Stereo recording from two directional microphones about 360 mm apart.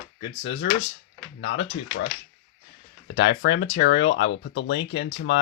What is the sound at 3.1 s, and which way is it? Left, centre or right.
Speech, left.